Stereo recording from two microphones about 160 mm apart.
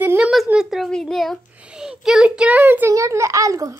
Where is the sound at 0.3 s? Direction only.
Centre (ahead or behind).